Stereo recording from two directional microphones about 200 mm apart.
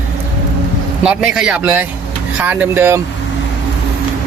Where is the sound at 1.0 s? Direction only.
5° right (ahead or behind).